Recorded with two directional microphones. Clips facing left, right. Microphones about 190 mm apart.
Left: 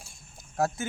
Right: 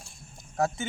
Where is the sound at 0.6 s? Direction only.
Centre (ahead or behind).